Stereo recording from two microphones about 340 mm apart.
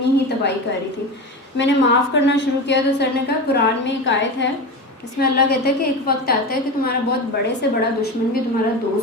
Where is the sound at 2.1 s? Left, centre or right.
Left.